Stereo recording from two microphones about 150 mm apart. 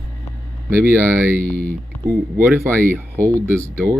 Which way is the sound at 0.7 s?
15° right (ahead or behind).